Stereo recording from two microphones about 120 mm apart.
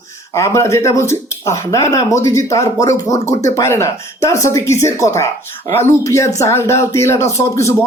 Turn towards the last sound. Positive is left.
turn(degrees=25)  # may be behind; listen again after turning